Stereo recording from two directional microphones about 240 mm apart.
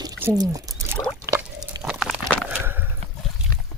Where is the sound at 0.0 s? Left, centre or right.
Centre.